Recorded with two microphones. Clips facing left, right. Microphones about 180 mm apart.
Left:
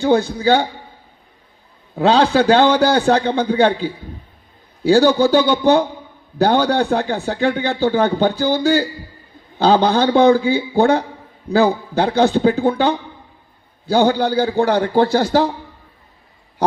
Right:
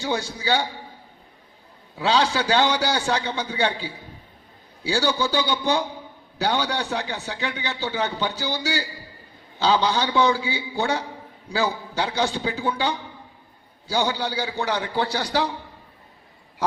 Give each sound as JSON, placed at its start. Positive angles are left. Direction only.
{"t": 0.0, "sound": "a man's voice", "side_deg": 55}
{"t": 2.0, "sound": "a man's voice", "side_deg": 55}